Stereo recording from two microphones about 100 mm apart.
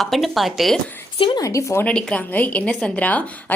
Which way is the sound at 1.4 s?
30° left (ahead or behind).